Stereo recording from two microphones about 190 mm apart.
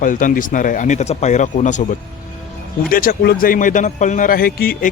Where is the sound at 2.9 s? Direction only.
50° left (ahead or behind).